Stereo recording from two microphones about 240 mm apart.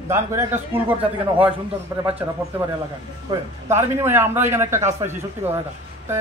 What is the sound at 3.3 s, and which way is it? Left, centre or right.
A man's voice, centre.